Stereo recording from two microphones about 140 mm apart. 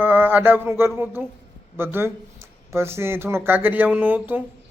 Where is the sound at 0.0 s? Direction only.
15° right (ahead or behind).